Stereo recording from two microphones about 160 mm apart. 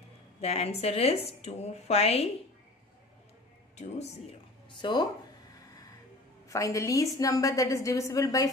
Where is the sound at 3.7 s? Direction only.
45° left (ahead or behind).